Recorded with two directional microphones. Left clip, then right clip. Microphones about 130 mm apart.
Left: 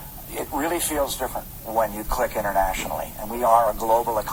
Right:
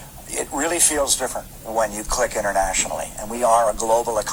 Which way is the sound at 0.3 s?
30° right (ahead or behind).